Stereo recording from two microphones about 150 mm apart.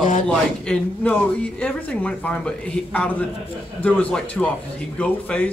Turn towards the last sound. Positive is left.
turn(degrees=10)  # may be behind; listen again after turning